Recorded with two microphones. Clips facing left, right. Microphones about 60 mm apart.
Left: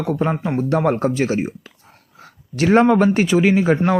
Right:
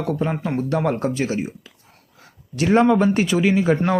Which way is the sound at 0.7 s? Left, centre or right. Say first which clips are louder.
Left 4 dB; left.